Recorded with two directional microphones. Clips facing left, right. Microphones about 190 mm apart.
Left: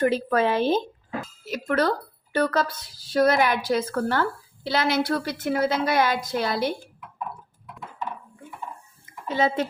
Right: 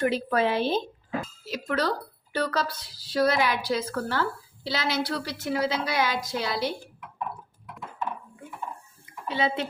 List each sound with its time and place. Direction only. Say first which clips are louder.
0.1 s a woman's voice: left 2 dB; 45° left (ahead or behind)
9.3 s a woman's voice: left 4 dB; 45° left (ahead or behind)